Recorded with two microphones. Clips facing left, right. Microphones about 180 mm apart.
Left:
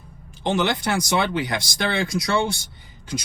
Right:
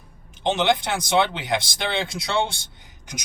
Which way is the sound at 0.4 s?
20° right (ahead or behind).